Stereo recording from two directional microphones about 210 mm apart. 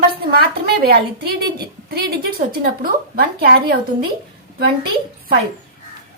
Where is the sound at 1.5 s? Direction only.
50° right (ahead or behind).